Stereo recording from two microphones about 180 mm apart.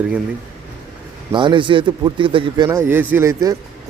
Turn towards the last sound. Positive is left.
turn(degrees=-15)  # may be behind; listen again after turning